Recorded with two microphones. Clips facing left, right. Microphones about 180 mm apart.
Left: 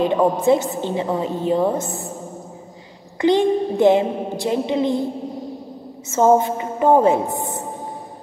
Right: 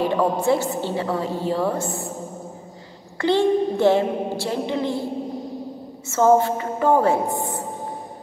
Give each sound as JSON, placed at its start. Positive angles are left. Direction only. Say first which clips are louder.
{"t": 0.0, "sound": "a woman's voice", "louder": "left 3 dB", "side_deg": 20}
{"t": 3.2, "sound": "a woman's voice", "louder": "left 2 dB", "side_deg": 15}
{"t": 6.0, "sound": "a woman's voice", "louder": "left 1 dB", "side_deg": 20}